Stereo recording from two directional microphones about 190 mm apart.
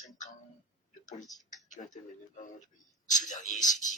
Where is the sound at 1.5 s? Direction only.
40° left (ahead or behind).